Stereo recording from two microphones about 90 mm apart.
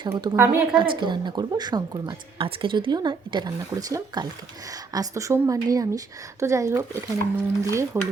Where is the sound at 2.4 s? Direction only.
70° right (ahead or behind); by 7.9 s 35° right (ahead or behind).